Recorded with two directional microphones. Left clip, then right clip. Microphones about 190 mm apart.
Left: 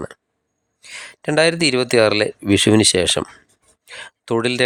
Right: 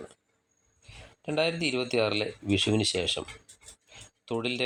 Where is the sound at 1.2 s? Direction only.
50° left (ahead or behind).